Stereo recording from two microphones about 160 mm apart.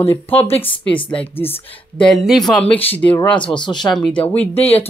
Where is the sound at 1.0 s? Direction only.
15° left (ahead or behind).